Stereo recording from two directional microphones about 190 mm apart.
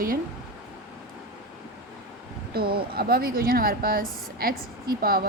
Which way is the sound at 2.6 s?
55° right (ahead or behind).